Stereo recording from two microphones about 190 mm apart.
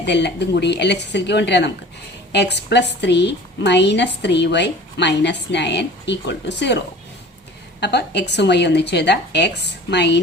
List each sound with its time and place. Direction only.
0.0 s a woman's voice: 65° left (ahead or behind)
7.8 s a woman's voice: 65° left (ahead or behind)